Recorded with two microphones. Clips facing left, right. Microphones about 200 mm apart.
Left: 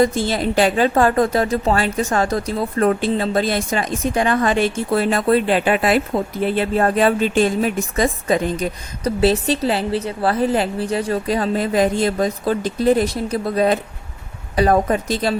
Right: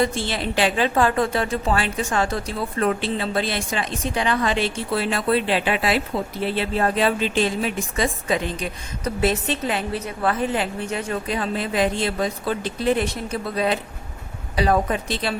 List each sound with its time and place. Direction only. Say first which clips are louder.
0.0 s a woman's voice: left 6 dB; 40° left (ahead or behind)